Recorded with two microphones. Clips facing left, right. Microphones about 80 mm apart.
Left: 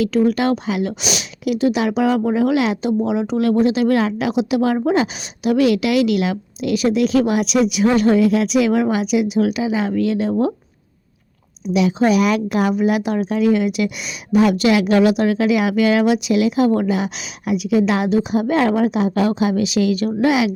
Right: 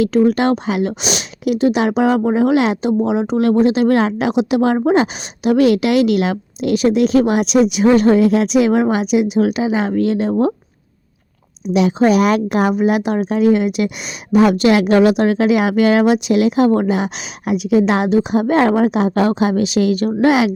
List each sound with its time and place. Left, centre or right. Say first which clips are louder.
0.0 s speech: right 3 dB; right
11.7 s a woman's voice: right 3 dB; right